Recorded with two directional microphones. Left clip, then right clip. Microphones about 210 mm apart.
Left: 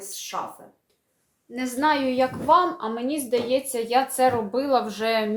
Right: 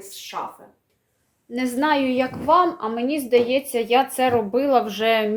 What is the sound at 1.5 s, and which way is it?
A woman's voice, 40° right (ahead or behind).